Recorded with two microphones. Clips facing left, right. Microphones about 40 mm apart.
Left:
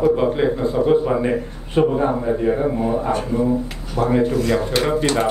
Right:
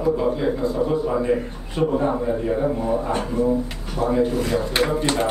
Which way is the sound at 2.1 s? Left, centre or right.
Centre.